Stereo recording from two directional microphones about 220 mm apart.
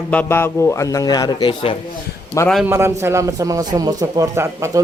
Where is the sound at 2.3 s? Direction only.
5° left (ahead or behind).